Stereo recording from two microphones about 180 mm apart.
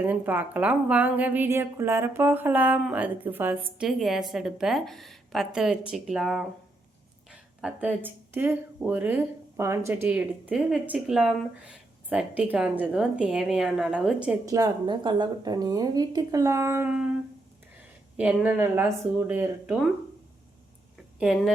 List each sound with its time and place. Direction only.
0.0 s speech: 10° right (ahead or behind)
7.6 s a woman's voice: 10° right (ahead or behind)
14.4 s speech: 20° right (ahead or behind)
21.2 s a woman's voice: 5° right (ahead or behind)